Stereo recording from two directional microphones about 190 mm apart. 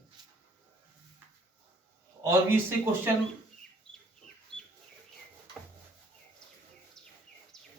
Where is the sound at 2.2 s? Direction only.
15° right (ahead or behind).